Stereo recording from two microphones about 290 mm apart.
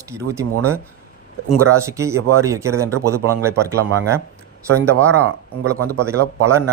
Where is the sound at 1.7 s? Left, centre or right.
Centre.